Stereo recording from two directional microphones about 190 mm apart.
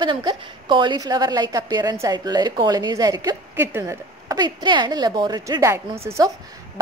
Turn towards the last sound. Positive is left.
turn(degrees=-15)  # may be behind; listen again after turning